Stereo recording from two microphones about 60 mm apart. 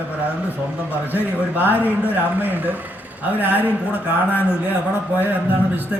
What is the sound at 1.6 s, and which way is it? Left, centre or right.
Speech, right.